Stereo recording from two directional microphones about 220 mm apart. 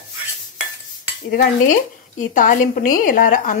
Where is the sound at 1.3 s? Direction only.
40° left (ahead or behind).